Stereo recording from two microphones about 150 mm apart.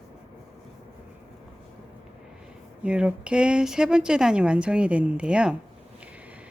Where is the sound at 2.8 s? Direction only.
10° right (ahead or behind).